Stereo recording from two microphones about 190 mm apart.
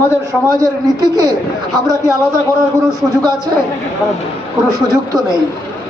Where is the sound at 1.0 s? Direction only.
20° right (ahead or behind).